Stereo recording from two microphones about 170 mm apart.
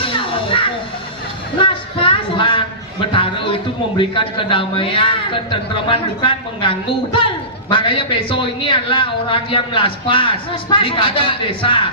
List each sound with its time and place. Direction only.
0.0 s children playing: 30° left (ahead or behind)
1.5 s a sound: 30° left (ahead or behind)
3.1 s speech: 30° left (ahead or behind)